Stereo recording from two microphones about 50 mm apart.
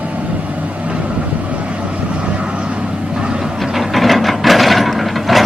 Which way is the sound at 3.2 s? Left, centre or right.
Centre.